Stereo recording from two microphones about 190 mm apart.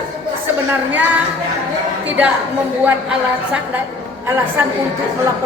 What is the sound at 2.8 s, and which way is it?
A woman's voice, 10° right (ahead or behind).